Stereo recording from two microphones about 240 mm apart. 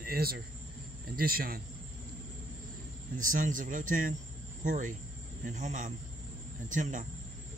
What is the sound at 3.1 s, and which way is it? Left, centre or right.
Speech, right.